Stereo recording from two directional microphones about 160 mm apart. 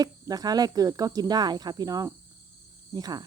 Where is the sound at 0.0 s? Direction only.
25° right (ahead or behind).